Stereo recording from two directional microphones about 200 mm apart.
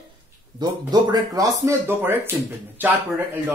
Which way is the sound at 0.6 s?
20° right (ahead or behind).